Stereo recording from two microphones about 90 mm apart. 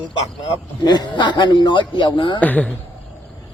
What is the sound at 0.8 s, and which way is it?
A man's voice, 55° left (ahead or behind).